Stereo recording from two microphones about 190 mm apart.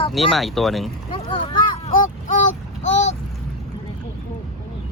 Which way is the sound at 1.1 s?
25° left (ahead or behind).